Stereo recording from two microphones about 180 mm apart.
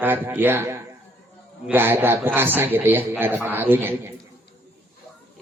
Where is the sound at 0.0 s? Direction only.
10° right (ahead or behind).